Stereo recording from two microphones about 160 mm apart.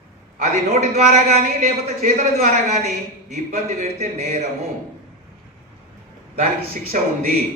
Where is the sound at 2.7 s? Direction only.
45° right (ahead or behind).